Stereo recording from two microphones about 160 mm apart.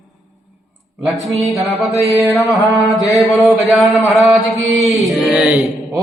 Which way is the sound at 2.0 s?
20° right (ahead or behind).